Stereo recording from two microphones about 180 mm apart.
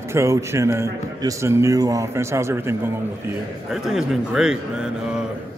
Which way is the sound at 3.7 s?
Centre (ahead or behind).